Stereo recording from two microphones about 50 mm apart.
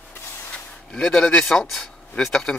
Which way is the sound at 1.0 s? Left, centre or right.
Centre.